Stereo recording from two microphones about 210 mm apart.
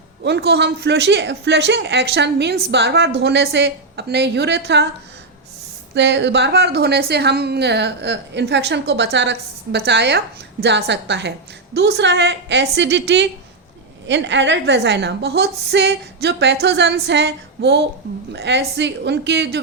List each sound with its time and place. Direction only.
0.3 s a woman's voice: 50° right (ahead or behind)
5.9 s a woman's voice: 55° right (ahead or behind)